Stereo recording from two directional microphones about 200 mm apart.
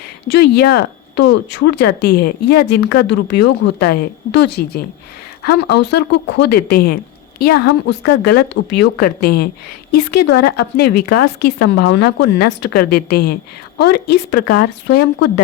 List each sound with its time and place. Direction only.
0.3 s speech: 55° left (ahead or behind)